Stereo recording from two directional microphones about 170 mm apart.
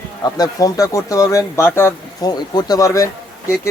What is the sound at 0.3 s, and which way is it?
Speech, 20° left (ahead or behind).